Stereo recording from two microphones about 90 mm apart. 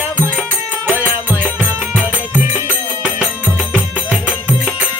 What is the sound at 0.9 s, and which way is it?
Music, 20° right (ahead or behind).